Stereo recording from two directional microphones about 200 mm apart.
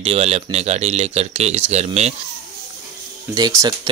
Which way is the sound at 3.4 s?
20° right (ahead or behind).